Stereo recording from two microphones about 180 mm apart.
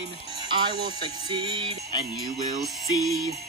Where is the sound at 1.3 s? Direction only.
30° right (ahead or behind).